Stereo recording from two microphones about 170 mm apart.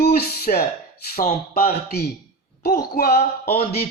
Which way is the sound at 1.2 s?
35° left (ahead or behind).